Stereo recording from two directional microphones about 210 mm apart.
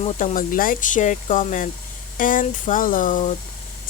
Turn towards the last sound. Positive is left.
turn(degrees=40)  # may be behind; listen again after turning